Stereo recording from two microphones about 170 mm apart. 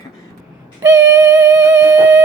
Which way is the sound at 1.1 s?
10° right (ahead or behind).